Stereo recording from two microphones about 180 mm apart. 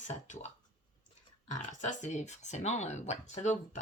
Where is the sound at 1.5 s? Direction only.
40° left (ahead or behind).